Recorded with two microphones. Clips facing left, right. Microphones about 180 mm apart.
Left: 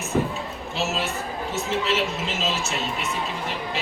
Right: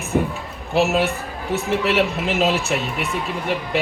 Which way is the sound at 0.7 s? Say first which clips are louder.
Right 9 dB; 60° right (ahead or behind).